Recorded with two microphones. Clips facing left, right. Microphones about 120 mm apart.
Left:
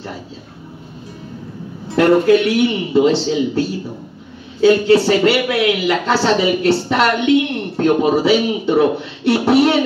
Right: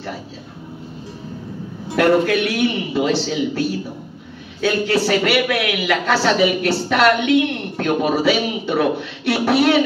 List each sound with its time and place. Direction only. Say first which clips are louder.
2.0 s speech: left 4 dB; 25° left (ahead or behind)